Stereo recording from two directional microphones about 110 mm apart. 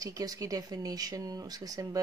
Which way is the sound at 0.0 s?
35° right (ahead or behind).